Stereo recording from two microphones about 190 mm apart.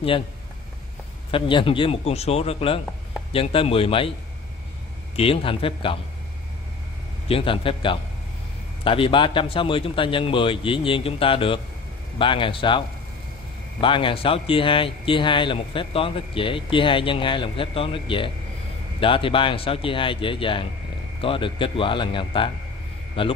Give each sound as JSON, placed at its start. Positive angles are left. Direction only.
{"t": 1.3, "sound": "speech", "side_deg": 25}
{"t": 5.1, "sound": "speech", "side_deg": 30}
{"t": 7.2, "sound": "speech", "side_deg": 30}